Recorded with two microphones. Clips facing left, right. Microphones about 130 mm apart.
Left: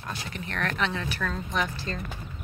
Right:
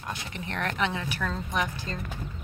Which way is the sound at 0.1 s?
20° right (ahead or behind).